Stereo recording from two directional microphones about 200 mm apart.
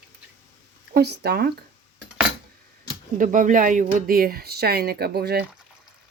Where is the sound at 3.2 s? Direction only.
40° right (ahead or behind).